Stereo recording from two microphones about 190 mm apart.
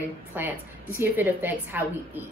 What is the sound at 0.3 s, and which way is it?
A woman's voice, 10° right (ahead or behind).